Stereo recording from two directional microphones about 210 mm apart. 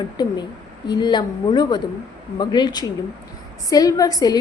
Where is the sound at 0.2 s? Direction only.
20° left (ahead or behind).